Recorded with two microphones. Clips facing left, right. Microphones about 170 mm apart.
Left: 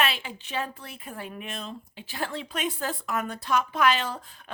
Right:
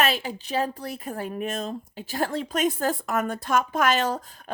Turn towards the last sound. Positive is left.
turn(degrees=-45)  # may be behind; listen again after turning